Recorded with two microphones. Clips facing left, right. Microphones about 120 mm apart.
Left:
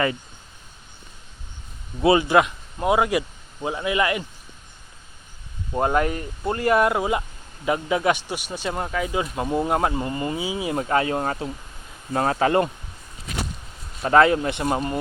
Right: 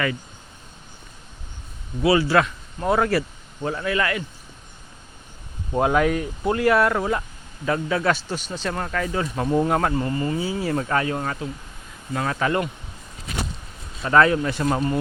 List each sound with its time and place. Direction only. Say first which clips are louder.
2.0 s speech: left 1 dB; 20° left (ahead or behind)
5.7 s speech: right 2 dB; centre (ahead or behind)
6.7 s a man's voice: left 1 dB; 15° left (ahead or behind)
10.8 s speech: left 2 dB; 25° left (ahead or behind)
14.0 s speech: left 1 dB; 30° left (ahead or behind)